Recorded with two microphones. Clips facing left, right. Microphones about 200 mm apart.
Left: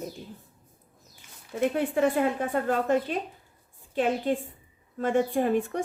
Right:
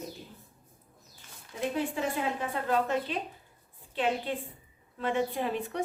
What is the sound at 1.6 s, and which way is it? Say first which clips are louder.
A woman's voice: left 7 dB; 55° left (ahead or behind).